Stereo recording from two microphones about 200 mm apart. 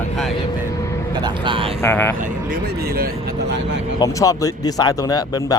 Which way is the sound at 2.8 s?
50° right (ahead or behind).